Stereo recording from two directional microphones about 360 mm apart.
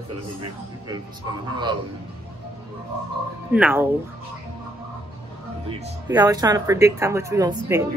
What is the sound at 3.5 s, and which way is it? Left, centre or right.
Speech, centre.